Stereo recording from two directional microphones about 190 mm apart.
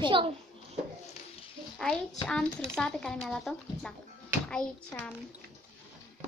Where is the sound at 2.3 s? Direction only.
5° left (ahead or behind).